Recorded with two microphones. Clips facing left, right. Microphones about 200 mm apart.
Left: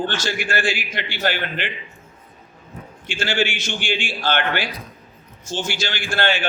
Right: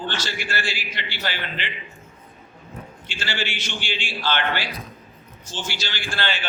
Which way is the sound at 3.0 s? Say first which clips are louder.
Left 8 dB; 50° left (ahead or behind).